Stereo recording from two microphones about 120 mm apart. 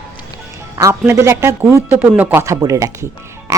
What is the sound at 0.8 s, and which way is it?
Speech, 25° right (ahead or behind).